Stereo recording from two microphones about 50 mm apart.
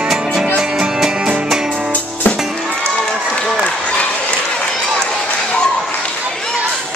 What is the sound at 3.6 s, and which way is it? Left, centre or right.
Applause, left.